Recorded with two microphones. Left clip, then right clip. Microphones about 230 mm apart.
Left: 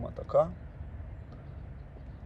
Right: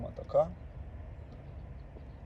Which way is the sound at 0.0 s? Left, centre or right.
Left.